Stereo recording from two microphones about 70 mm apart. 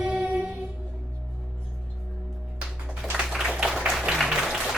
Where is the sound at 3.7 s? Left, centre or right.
Centre.